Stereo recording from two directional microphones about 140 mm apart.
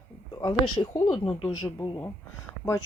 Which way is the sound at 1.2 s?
30° left (ahead or behind).